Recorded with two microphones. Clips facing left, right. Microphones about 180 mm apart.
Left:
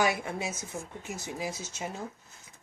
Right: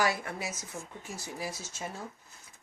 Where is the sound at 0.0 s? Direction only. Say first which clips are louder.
Left 2 dB; 20° left (ahead or behind).